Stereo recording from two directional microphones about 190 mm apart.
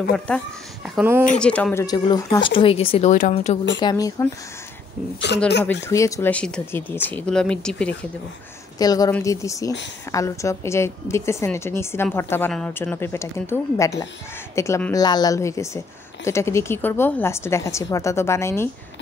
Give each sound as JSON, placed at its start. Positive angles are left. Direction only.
{"t": 0.9, "sound": "speech", "side_deg": -10}
{"t": 1.4, "sound": "speech", "side_deg": 5}
{"t": 3.8, "sound": "speech", "side_deg": 20}
{"t": 5.6, "sound": "a woman's voice", "side_deg": 15}
{"t": 6.3, "sound": "a woman's voice", "side_deg": 5}
{"t": 8.7, "sound": "a woman's voice", "side_deg": 20}